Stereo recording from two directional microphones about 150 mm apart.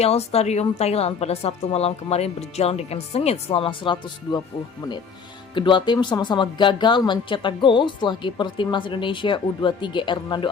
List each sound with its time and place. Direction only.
0.0 s a woman's voice: 45° left (ahead or behind)
5.5 s a woman's voice: 30° left (ahead or behind)